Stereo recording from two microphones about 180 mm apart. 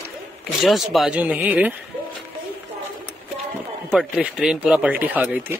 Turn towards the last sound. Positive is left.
turn(degrees=-10)  # may be behind; listen again after turning